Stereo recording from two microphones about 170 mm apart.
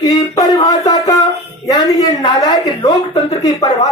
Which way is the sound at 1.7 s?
20° left (ahead or behind).